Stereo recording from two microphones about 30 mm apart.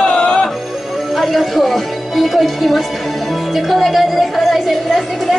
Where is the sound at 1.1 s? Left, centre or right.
Centre.